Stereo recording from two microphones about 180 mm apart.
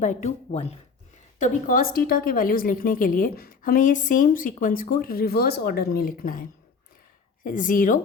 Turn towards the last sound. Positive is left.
turn(degrees=50)  # may be behind; listen again after turning